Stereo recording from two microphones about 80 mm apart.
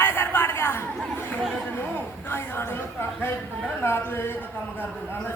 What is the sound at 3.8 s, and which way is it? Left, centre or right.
Speech, left.